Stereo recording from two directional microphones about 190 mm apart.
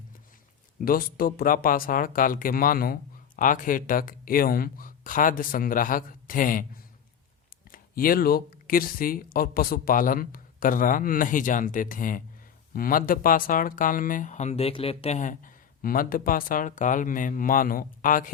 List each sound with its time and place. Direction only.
0.9 s speech: 50° left (ahead or behind)
7.7 s speech: 50° left (ahead or behind)